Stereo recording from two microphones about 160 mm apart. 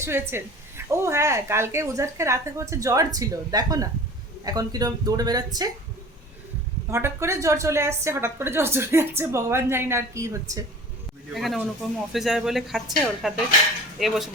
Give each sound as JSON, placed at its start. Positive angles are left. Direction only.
{"t": 0.0, "sound": "a woman's voice", "side_deg": -15}
{"t": 6.9, "sound": "a woman's voice", "side_deg": -15}
{"t": 11.3, "sound": "speech", "side_deg": 0}